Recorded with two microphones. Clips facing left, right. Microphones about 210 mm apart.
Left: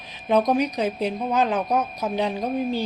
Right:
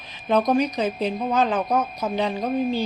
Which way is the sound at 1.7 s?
Centre (ahead or behind).